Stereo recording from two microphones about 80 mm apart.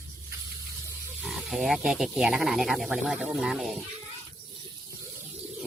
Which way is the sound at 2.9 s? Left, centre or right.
Centre.